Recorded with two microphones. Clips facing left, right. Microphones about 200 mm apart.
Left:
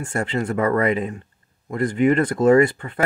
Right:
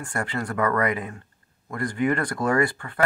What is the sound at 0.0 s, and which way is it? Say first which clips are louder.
Speech: left 5 dB; 25° left (ahead or behind).